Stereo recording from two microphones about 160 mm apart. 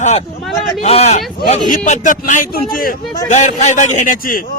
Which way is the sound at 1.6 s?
55° left (ahead or behind).